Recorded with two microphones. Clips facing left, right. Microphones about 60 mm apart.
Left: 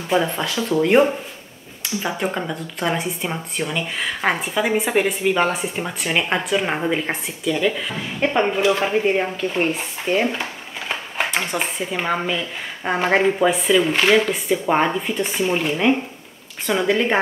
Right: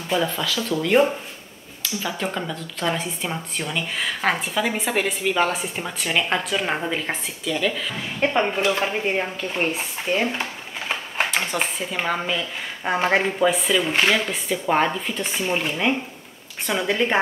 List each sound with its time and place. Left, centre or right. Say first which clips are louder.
0.3 s speech: left 3 dB; left; by 17.1 s centre